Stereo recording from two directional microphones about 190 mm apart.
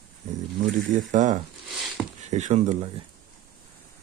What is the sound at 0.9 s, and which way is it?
Speech, 40° right (ahead or behind).